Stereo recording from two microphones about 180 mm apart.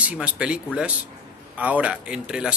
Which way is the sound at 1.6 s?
5° right (ahead or behind).